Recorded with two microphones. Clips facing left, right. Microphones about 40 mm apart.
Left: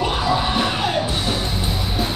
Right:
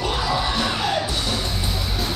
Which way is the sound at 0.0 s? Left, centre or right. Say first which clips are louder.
Left 3 dB; centre.